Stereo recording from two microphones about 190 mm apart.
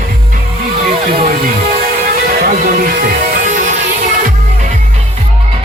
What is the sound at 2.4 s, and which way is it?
Music, 50° right (ahead or behind).